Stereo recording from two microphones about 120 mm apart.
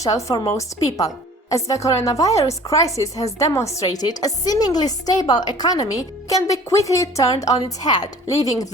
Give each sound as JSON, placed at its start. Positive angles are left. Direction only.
{"t": 0.5, "sound": "speech", "side_deg": 30}